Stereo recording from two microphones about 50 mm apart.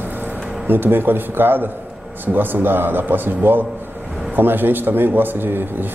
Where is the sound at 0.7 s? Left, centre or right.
Right.